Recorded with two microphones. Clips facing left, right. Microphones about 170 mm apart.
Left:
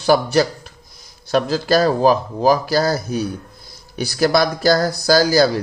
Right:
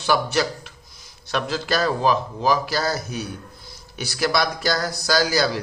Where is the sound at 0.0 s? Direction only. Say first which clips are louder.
Left 6 dB; 40° left (ahead or behind).